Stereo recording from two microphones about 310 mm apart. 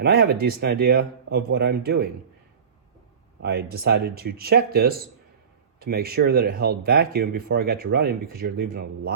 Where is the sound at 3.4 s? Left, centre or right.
Right.